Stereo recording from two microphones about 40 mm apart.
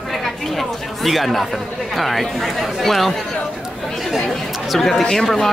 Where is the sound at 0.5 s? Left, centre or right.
Centre.